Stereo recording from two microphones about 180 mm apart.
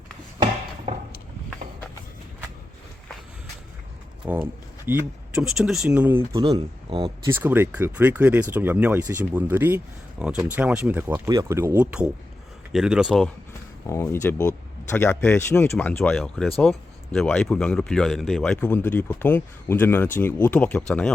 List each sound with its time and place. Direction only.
0.9 s a sound: 35° right (ahead or behind)
4.2 s speech: 10° right (ahead or behind)
6.4 s speech: 25° right (ahead or behind); by 13.3 s centre (ahead or behind)
13.8 s speech: 15° left (ahead or behind)